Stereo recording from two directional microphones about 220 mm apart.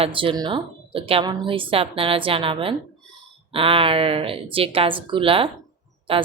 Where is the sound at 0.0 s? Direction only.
25° right (ahead or behind).